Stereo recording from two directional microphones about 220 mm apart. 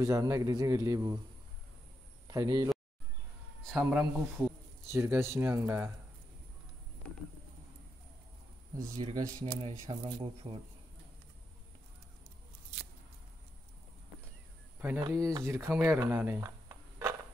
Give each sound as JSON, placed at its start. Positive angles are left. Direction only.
{"t": 0.0, "sound": "a man's voice", "side_deg": -15}
{"t": 2.2, "sound": "speech", "side_deg": -15}
{"t": 3.6, "sound": "a man's voice", "side_deg": 0}
{"t": 8.9, "sound": "a man's voice", "side_deg": -15}
{"t": 14.8, "sound": "speech", "side_deg": -10}